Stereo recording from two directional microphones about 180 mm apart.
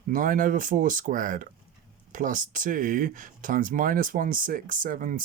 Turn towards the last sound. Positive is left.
turn(degrees=-50)  # may be behind; listen again after turning